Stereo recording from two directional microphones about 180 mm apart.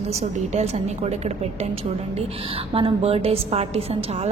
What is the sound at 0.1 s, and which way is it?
A woman's voice, 35° right (ahead or behind).